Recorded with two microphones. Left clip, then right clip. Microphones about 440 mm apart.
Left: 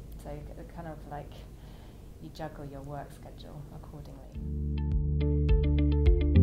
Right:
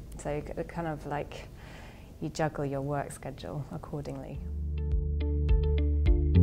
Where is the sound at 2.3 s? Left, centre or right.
Right.